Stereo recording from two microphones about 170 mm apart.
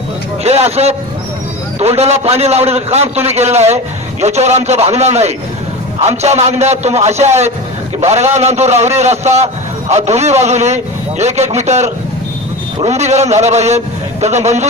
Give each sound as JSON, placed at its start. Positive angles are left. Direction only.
{"t": 0.4, "sound": "a man's voice", "side_deg": -40}